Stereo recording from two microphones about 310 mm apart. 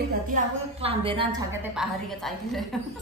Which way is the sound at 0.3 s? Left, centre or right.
Centre.